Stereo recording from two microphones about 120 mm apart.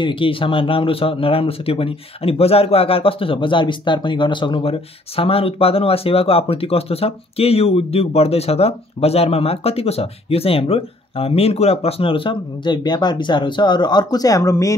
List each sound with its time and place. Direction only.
0.0 s speech: 45° left (ahead or behind); by 14.8 s 25° left (ahead or behind)